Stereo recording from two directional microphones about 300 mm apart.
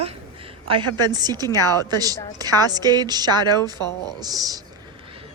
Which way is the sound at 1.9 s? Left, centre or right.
Centre.